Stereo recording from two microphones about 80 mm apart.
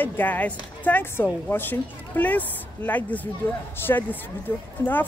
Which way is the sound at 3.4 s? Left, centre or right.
Left.